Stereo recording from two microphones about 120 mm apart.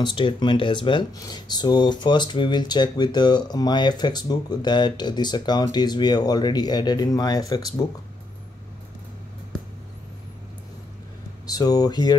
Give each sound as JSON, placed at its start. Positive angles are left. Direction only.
{"t": 0.0, "sound": "speech", "side_deg": 40}
{"t": 11.4, "sound": "speech", "side_deg": 30}